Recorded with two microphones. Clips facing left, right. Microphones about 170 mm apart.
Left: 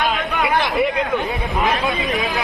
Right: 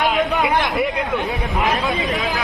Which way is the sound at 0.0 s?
20° right (ahead or behind).